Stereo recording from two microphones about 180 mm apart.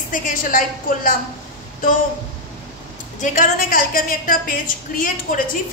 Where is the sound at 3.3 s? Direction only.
50° left (ahead or behind).